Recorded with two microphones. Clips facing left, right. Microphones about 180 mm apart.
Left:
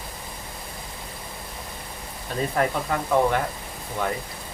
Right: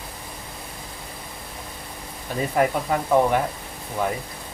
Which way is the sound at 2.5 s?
10° right (ahead or behind).